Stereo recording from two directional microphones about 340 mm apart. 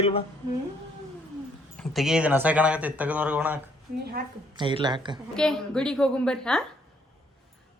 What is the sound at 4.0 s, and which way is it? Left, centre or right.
Speech, right.